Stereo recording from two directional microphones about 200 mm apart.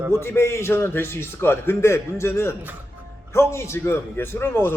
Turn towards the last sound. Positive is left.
turn(degrees=10)  # may be behind; listen again after turning